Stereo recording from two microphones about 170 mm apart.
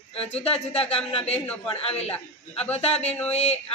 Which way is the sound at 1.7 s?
35° left (ahead or behind).